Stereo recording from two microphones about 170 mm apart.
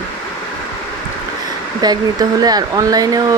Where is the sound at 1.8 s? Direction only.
25° right (ahead or behind).